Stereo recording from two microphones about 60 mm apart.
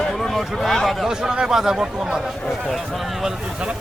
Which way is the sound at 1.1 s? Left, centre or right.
Centre.